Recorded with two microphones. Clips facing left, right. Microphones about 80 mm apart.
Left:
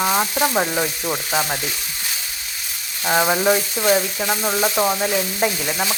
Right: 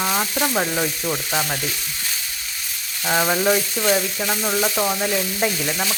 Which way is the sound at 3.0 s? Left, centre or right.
Centre.